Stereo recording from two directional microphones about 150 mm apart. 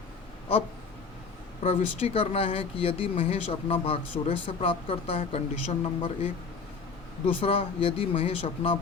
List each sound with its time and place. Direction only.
1.6 s speech: 45° left (ahead or behind)
7.4 s speech: 40° left (ahead or behind)